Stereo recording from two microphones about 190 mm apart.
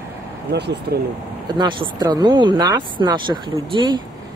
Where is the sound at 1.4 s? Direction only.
25° right (ahead or behind).